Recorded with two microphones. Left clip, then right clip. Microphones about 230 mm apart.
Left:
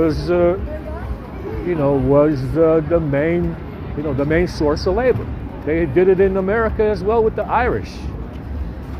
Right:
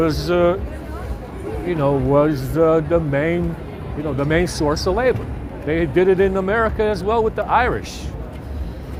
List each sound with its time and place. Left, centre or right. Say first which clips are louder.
0.0 s speech: left 1 dB; right
1.7 s speech: left 2 dB; right